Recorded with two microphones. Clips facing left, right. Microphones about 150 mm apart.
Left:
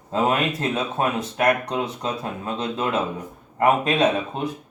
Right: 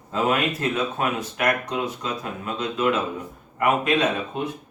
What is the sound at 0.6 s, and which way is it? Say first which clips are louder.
Speech: left 1 dB; 30° left (ahead or behind).